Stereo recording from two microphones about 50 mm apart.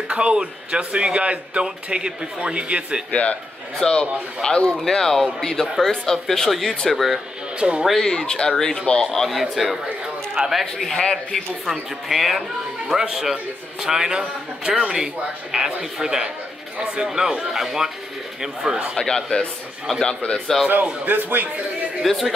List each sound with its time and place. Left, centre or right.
0.1 s speech: right
3.1 s a man's voice: left
3.8 s speech: centre
7.5 s speech: right
8.0 s a man's voice: centre
11.0 s speech: centre
12.1 s a man's voice: centre; by 17.1 s right
17.1 s a man's voice: centre
18.9 s a man's voice: centre
20.6 s a man's voice: right
22.0 s a man's voice: centre